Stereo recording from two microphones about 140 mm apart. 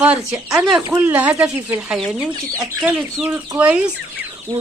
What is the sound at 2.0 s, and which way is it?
Speech, centre (ahead or behind).